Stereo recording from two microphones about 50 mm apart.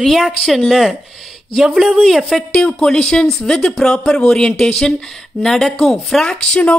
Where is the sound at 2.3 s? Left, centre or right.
Centre.